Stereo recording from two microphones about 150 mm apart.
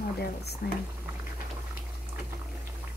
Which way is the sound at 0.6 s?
80° left.